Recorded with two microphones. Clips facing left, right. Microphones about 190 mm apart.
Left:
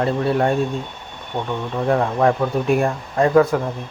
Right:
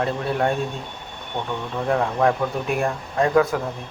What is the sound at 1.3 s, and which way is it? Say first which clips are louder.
Speech: left 3 dB; 15° left (ahead or behind).